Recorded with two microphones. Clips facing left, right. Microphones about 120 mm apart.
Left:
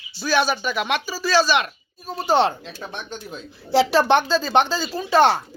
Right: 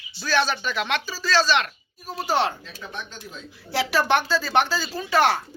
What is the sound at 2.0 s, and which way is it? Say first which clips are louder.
Speech: left 5 dB; 25° left (ahead or behind).